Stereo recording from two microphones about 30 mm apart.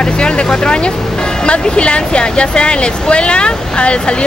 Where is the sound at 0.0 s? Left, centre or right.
Left.